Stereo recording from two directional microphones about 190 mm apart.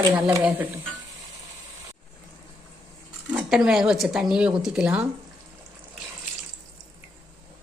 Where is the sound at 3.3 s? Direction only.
Centre (ahead or behind).